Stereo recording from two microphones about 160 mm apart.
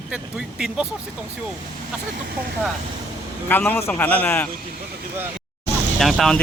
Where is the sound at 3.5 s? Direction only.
10° left (ahead or behind).